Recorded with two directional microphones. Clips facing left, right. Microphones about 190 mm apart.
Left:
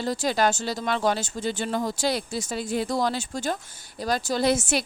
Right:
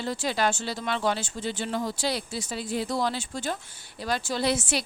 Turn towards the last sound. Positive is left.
turn(degrees=45)  # may be behind; listen again after turning